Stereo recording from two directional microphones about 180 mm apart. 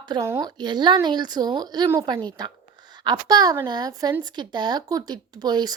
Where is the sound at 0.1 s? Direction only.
15° right (ahead or behind).